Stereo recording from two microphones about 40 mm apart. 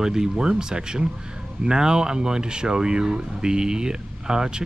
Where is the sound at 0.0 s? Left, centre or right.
Centre.